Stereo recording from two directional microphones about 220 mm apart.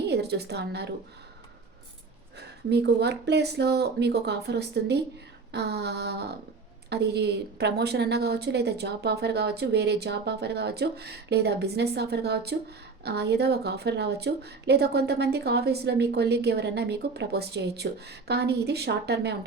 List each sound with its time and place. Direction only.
0.1 s a woman's voice: 50° right (ahead or behind)
2.6 s a woman's voice: 50° right (ahead or behind)